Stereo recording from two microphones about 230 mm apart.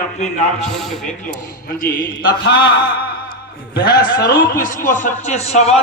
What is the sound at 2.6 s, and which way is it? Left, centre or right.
Speech, centre.